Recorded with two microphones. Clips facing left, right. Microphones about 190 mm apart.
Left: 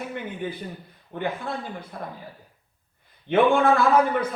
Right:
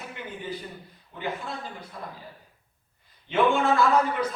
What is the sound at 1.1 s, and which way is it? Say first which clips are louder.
Speech: left 7 dB; 55° left (ahead or behind).